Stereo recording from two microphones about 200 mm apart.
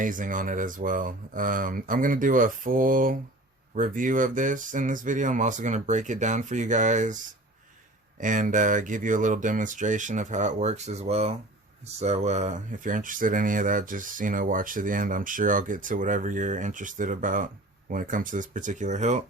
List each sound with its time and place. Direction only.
0.0 s speech: 40° right (ahead or behind)
8.2 s speech: 40° right (ahead or behind)